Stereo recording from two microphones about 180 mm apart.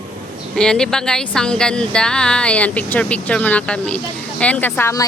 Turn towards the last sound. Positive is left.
turn(degrees=15)  # may be behind; listen again after turning